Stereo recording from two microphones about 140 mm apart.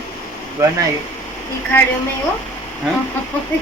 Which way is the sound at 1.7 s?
20° left (ahead or behind).